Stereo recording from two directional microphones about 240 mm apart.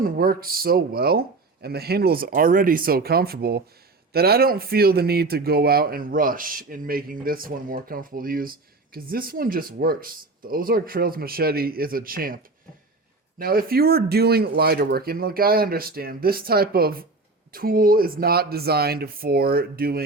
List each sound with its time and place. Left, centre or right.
0.0 s speech: right
13.4 s speech: right